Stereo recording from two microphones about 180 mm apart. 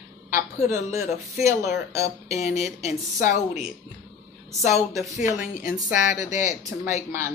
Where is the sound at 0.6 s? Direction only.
40° left (ahead or behind).